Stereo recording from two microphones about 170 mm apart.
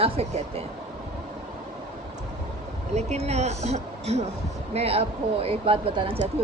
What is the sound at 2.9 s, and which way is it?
A woman's voice, 40° right (ahead or behind).